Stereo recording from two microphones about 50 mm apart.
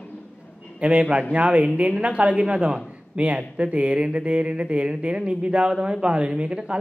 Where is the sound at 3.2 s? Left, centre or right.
Right.